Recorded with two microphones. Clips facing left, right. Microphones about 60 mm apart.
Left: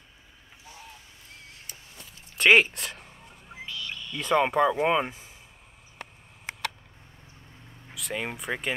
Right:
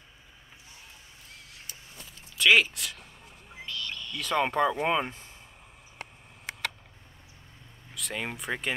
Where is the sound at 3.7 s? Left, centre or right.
Centre.